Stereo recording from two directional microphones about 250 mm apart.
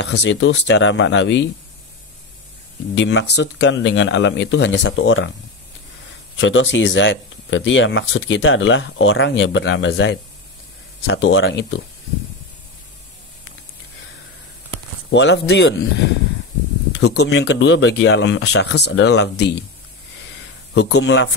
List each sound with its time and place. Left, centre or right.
0.2 s speech: left
2.9 s speech: left
6.3 s speech: left
15.0 s speech: left
16.9 s a sound: left
17.3 s speech: left
20.7 s speech: left